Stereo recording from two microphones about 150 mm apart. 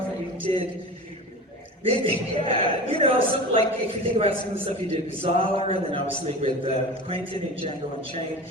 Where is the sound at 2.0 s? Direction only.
40° right (ahead or behind).